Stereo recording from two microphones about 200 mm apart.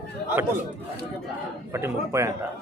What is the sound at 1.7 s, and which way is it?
Speech, 15° right (ahead or behind).